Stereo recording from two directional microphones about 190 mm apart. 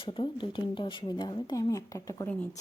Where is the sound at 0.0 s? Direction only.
25° left (ahead or behind).